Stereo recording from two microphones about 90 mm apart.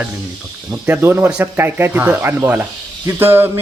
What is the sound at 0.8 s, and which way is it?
Speech, 25° right (ahead or behind).